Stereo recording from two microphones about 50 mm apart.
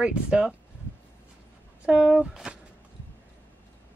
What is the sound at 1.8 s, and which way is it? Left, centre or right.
Speech, centre.